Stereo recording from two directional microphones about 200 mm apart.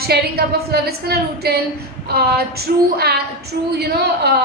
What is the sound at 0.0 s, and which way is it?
A woman's voice, 50° right (ahead or behind).